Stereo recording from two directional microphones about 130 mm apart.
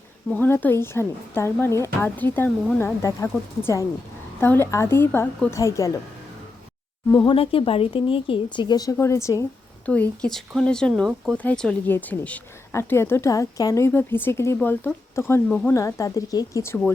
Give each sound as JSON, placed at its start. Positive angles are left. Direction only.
{"t": 0.3, "sound": "a woman's voice", "side_deg": 15}
{"t": 7.1, "sound": "a woman's voice", "side_deg": 30}
{"t": 7.3, "sound": "a woman's voice", "side_deg": 45}
{"t": 9.8, "sound": "speech", "side_deg": 10}
{"t": 15.4, "sound": "speech", "side_deg": 10}
{"t": 15.7, "sound": "a woman's voice", "side_deg": 25}